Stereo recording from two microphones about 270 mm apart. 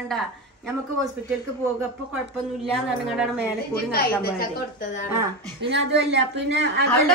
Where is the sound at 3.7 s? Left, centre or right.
Left.